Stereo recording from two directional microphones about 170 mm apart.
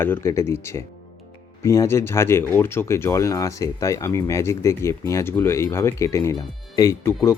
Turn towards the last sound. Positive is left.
turn(degrees=20)  # may be behind; listen again after turning